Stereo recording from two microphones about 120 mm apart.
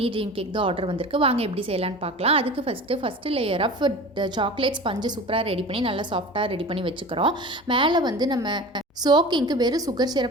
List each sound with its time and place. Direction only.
0.0 s a woman's voice: 50° right (ahead or behind)